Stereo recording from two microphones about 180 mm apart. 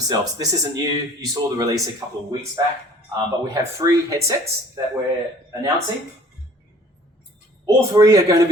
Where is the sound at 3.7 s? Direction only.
15° right (ahead or behind).